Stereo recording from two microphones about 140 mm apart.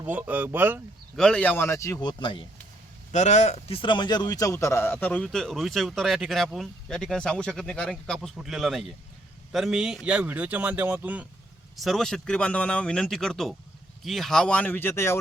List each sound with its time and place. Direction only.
0.0 s speech: 10° right (ahead or behind)
1.1 s a man's voice: 5° left (ahead or behind); by 2.4 s 35° left (ahead or behind)
3.1 s a man's voice: 55° left (ahead or behind); by 11.3 s 10° right (ahead or behind)
11.8 s a man's voice: centre (ahead or behind); by 15.2 s 15° left (ahead or behind)